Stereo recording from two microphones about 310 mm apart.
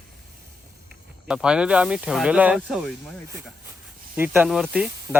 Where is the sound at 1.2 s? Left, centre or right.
Centre.